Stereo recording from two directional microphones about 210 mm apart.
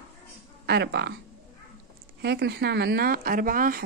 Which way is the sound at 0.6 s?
50° right (ahead or behind).